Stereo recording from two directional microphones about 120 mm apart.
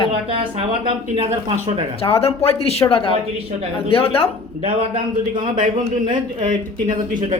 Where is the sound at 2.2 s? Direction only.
55° left (ahead or behind).